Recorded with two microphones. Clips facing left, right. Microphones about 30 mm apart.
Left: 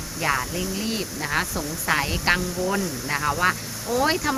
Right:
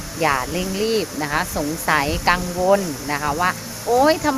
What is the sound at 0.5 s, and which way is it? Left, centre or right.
Speech, right.